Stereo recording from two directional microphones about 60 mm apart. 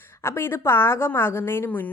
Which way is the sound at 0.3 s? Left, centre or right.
Left.